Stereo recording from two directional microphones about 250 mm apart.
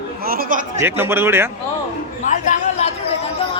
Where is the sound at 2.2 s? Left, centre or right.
Left.